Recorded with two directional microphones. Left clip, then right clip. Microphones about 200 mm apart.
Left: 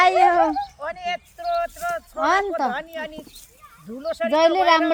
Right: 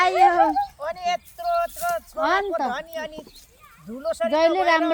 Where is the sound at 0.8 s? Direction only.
5° right (ahead or behind).